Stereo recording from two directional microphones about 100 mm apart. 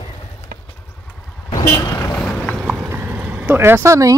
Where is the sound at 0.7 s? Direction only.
20° left (ahead or behind).